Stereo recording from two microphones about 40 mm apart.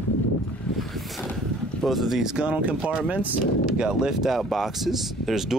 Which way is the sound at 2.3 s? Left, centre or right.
Right.